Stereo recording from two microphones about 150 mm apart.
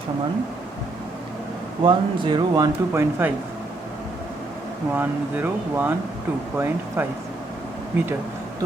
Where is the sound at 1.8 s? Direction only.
35° right (ahead or behind); by 3.3 s 15° right (ahead or behind).